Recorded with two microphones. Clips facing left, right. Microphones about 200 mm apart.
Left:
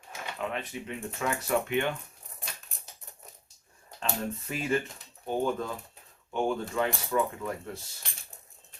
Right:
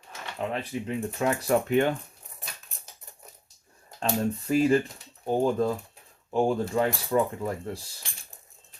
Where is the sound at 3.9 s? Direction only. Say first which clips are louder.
Right 6 dB; 40° right (ahead or behind).